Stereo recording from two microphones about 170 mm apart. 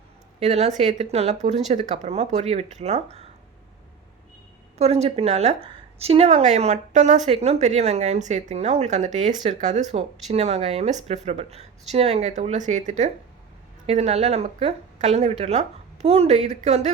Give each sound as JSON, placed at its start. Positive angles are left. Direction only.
{"t": 0.3, "sound": "a woman's voice", "side_deg": -40}
{"t": 4.8, "sound": "a woman's voice", "side_deg": -40}